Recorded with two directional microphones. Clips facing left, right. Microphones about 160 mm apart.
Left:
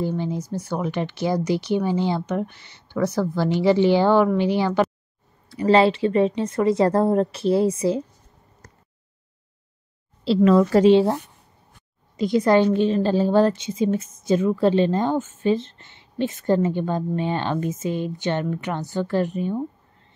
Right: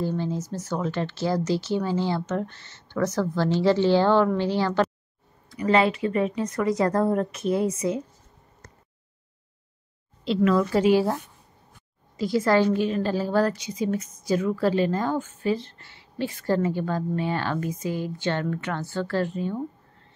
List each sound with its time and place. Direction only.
0.0 s speech: 15° left (ahead or behind)
5.5 s a woman's voice: 30° left (ahead or behind)
10.2 s a woman's voice: 30° left (ahead or behind)
12.2 s a woman's voice: 20° left (ahead or behind)